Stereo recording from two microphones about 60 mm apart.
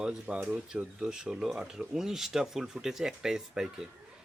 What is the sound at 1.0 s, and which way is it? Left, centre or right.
Speech, centre.